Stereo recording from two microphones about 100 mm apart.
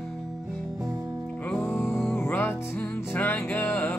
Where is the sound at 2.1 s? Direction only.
20° left (ahead or behind).